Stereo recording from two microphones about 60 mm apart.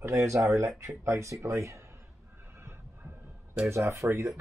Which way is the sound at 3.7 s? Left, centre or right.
Right.